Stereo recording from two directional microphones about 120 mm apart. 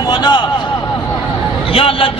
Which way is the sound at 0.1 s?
35° left (ahead or behind).